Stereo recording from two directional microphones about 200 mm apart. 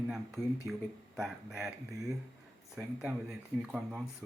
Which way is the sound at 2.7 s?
5° right (ahead or behind).